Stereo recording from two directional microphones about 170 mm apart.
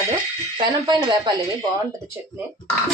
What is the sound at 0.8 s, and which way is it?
Speech, 25° right (ahead or behind).